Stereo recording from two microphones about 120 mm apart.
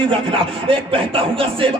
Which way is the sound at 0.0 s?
45° right (ahead or behind).